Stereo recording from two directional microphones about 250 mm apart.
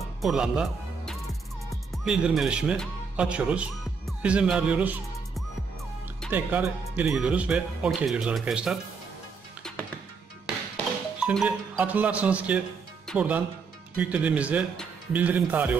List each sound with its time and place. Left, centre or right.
0.2 s speech: centre
11.1 s speech: centre